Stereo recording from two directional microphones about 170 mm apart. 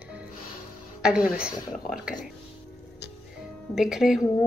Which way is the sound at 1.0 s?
5° right (ahead or behind).